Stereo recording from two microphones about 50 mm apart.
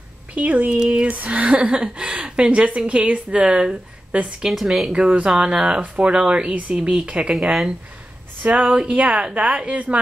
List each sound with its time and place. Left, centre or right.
0.3 s speech: right
4.5 s speech: centre
4.9 s speech: right
8.4 s speech: right